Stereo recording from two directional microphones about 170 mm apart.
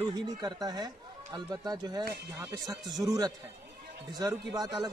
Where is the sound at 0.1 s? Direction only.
25° right (ahead or behind).